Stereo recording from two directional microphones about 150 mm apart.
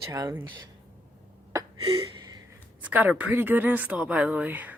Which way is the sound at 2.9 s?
10° right (ahead or behind).